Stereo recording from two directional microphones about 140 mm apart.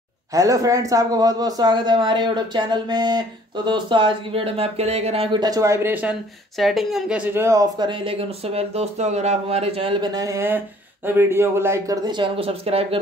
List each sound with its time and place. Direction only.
0.3 s speech: 25° right (ahead or behind); by 5.4 s 45° right (ahead or behind)
5.4 s speech: 25° right (ahead or behind)
6.6 s speech: centre (ahead or behind); by 13.0 s 45° right (ahead or behind)